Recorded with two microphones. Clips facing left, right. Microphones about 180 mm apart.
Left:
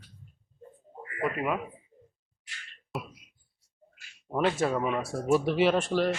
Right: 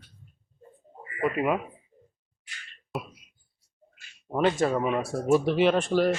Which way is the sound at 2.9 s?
Centre (ahead or behind).